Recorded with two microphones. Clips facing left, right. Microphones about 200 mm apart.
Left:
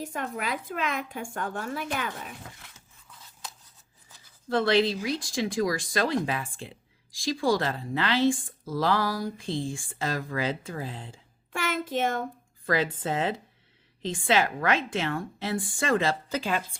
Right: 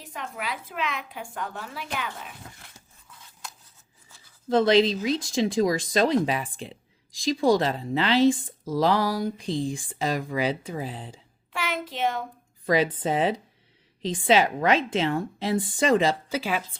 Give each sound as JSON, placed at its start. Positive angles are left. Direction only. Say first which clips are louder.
{"t": 0.0, "sound": "a woman's voice", "louder": "left 3 dB", "side_deg": 50}
{"t": 4.4, "sound": "speech", "louder": "right 4 dB", "side_deg": -20}
{"t": 11.5, "sound": "a sound", "louder": "left 2 dB", "side_deg": 45}
{"t": 12.6, "sound": "speech", "louder": "right 4 dB", "side_deg": -15}